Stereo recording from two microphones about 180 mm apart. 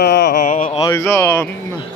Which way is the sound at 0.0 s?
65° left (ahead or behind).